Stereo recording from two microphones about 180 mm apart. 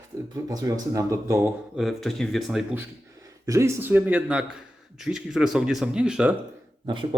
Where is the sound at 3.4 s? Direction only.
15° right (ahead or behind).